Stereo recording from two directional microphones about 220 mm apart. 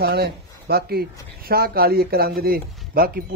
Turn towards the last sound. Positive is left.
turn(degrees=-40)  # may be behind; listen again after turning